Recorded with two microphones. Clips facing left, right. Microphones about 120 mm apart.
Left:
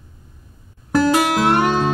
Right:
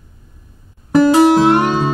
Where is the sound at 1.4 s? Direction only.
5° right (ahead or behind).